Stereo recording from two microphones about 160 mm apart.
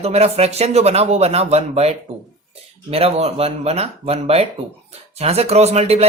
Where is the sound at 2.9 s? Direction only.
40° right (ahead or behind).